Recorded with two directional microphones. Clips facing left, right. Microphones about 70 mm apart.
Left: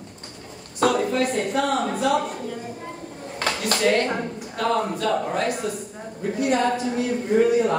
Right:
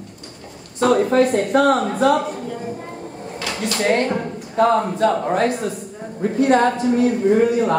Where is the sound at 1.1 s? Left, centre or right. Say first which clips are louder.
Right 7 dB; right.